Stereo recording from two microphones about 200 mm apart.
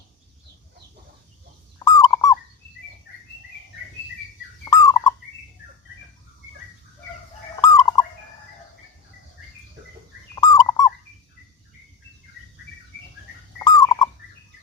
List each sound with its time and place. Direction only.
2.0 s turkey: 20° left (ahead or behind)
4.6 s bird: 15° left (ahead or behind)
7.6 s fowl: 15° left (ahead or behind)
10.3 s turkey: 20° left (ahead or behind)
13.6 s bird: 20° left (ahead or behind)